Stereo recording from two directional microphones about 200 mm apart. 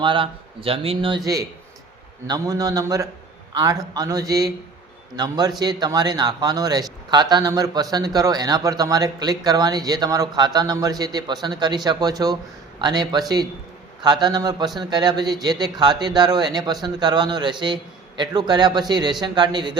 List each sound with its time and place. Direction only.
0.0 s a man's voice: 25° right (ahead or behind)